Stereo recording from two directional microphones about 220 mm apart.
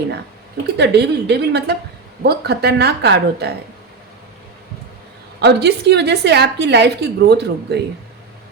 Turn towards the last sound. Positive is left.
turn(degrees=-50)  # may be behind; listen again after turning